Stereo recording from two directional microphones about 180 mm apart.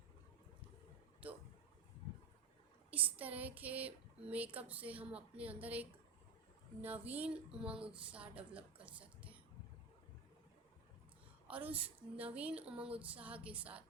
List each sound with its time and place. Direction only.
1.2 s a sound: 10° right (ahead or behind)
2.9 s speech: 10° right (ahead or behind)
11.4 s speech: 10° right (ahead or behind)